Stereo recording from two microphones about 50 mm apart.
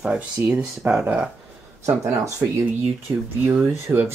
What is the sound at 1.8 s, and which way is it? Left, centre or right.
Speech, right.